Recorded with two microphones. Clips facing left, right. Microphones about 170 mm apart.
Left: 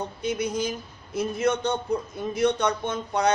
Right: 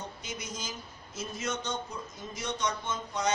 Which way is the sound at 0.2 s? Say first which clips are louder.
Left 14 dB; 60° left (ahead or behind).